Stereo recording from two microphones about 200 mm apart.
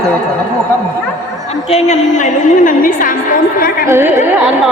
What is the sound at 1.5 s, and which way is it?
A woman's voice, 30° left (ahead or behind).